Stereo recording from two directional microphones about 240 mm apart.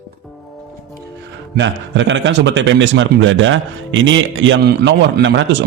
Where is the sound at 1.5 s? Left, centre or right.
Right.